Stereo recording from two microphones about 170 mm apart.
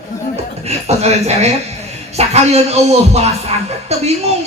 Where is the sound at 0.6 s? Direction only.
40° right (ahead or behind).